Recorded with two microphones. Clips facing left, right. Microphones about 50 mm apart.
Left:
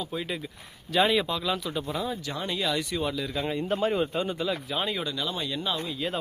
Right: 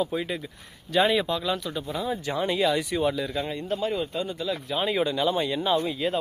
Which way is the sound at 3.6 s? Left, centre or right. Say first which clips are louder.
Left 4 dB; left.